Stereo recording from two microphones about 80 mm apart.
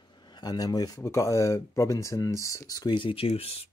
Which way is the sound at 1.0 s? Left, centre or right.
Left.